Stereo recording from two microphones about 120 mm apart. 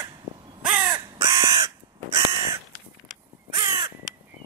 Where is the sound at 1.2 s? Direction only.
25° right (ahead or behind).